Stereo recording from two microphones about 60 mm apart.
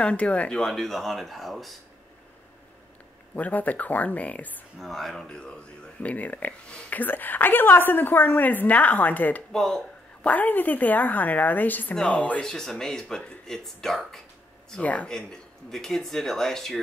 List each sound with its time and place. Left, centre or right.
0.0 s speech: centre
3.3 s speech: left
4.7 s speech: centre; by 9.4 s left
9.5 s speech: centre
10.2 s speech: left
12.4 s speech: centre
14.8 s speech: left
15.0 s speech: centre